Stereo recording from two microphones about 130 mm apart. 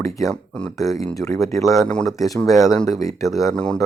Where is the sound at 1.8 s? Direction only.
5° left (ahead or behind).